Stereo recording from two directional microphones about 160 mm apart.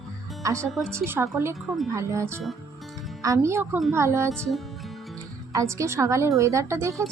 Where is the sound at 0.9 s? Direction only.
15° right (ahead or behind).